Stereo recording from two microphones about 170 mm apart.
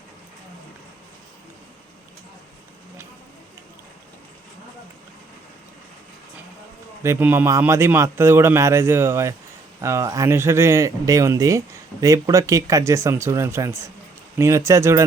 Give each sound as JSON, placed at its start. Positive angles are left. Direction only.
{"t": 7.0, "sound": "a man's voice", "side_deg": -15}